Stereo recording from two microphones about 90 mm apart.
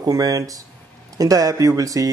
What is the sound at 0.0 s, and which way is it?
Speech, 45° right (ahead or behind).